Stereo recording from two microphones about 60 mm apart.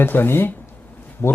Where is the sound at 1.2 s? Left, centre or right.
Left.